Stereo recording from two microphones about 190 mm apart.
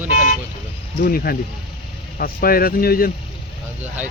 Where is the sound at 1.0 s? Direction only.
50° left (ahead or behind).